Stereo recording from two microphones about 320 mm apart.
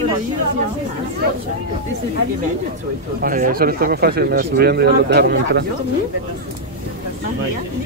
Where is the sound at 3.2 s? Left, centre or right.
Right.